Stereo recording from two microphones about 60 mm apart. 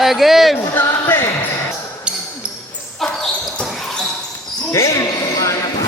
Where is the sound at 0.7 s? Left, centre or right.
Left.